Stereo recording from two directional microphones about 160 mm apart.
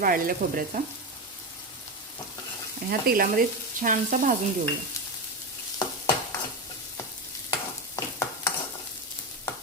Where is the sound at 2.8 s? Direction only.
65° right (ahead or behind).